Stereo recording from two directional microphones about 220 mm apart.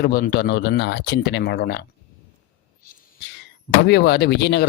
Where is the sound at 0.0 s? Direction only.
45° left (ahead or behind).